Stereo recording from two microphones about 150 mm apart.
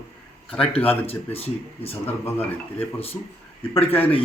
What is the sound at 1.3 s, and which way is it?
Speech, 40° left (ahead or behind).